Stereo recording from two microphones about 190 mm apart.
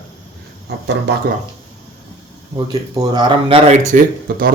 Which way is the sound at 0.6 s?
65° right (ahead or behind).